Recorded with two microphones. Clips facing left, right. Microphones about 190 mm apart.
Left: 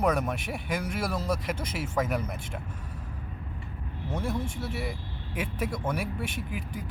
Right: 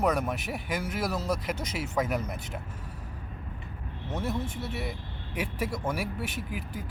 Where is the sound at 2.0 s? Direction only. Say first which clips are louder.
Even; 5° right (ahead or behind).